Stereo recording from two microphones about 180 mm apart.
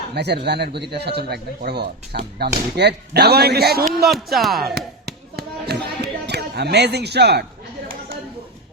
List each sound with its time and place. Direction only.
0.1 s a man's voice: 70° right (ahead or behind)
4.0 s speech: centre (ahead or behind)
5.0 s a sound: 65° right (ahead or behind)